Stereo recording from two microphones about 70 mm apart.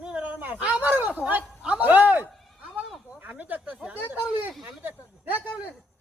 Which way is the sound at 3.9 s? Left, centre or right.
Right.